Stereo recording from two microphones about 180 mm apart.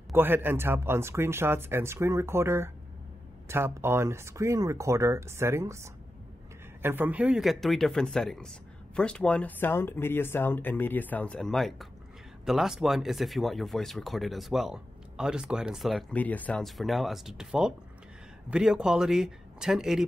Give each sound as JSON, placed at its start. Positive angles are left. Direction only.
{"t": 0.1, "sound": "speech", "side_deg": -10}